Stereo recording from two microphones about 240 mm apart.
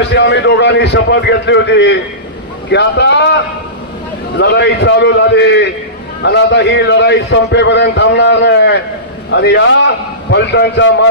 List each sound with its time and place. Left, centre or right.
0.1 s a man's voice: left